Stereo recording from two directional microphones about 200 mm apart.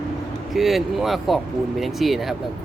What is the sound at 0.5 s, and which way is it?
Speech, centre (ahead or behind).